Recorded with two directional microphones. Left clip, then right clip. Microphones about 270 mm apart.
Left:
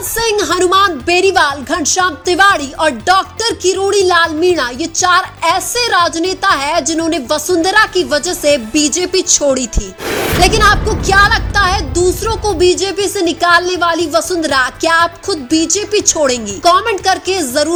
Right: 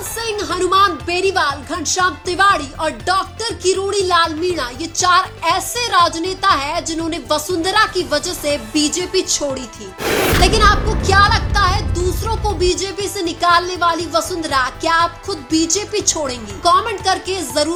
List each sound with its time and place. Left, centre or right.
0.2 s a woman's voice: left
10.1 s speech: centre
10.4 s a woman's voice: left